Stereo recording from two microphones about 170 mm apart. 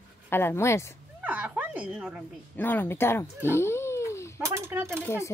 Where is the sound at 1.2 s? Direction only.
10° right (ahead or behind).